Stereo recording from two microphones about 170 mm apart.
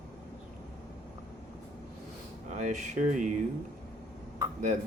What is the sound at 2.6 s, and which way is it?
Speech, 45° right (ahead or behind).